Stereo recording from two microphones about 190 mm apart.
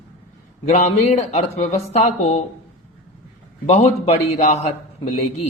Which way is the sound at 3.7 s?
35° left (ahead or behind).